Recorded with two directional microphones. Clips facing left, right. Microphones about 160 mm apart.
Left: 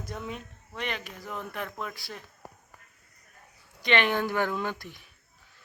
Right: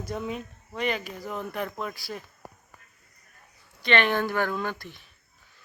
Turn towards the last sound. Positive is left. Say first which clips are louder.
# right 1 dB
turn(degrees=15)  # may be behind; listen again after turning